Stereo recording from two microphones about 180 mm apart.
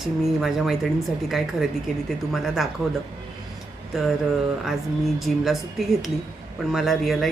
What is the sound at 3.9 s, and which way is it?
Speech, centre (ahead or behind).